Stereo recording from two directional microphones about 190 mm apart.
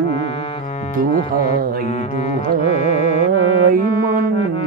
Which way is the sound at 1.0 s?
50° right (ahead or behind).